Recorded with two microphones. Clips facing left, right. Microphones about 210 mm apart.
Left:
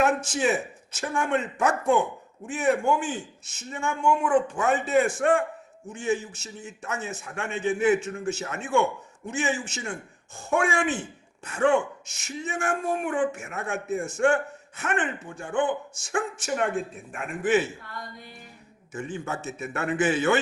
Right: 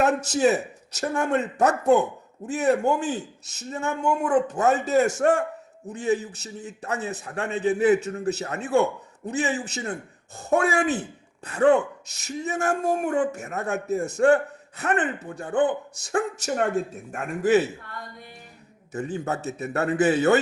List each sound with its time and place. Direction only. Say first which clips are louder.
0.0 s speech: right 3 dB; 40° right (ahead or behind)
18.9 s speech: right 4 dB; 40° right (ahead or behind)